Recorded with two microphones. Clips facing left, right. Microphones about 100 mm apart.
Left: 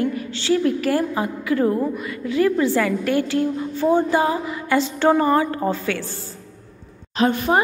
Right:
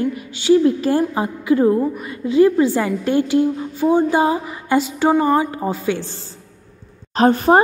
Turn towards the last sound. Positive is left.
turn(degrees=-40)  # may be behind; listen again after turning